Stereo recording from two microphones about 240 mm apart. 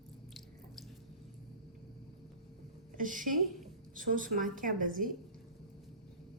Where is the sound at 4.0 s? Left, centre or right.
Right.